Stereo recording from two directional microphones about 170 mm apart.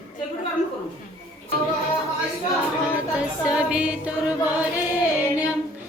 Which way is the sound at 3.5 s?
5° right (ahead or behind).